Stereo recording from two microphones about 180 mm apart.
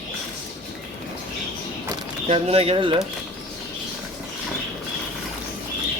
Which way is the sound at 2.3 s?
35° right (ahead or behind).